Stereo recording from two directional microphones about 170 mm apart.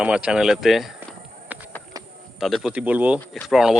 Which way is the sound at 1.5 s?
10° right (ahead or behind).